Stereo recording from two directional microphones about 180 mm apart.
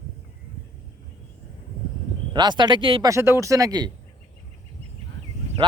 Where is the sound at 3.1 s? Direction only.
15° right (ahead or behind).